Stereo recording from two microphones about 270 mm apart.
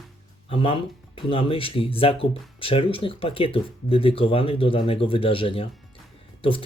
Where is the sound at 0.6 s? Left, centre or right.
Centre.